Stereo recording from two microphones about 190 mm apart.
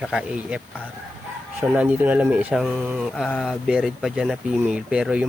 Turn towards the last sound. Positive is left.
turn(degrees=-5)  # may be behind; listen again after turning